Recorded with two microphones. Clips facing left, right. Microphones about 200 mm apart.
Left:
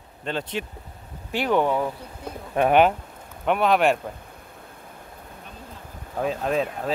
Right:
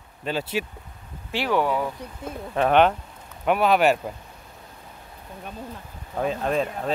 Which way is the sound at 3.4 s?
5° right (ahead or behind).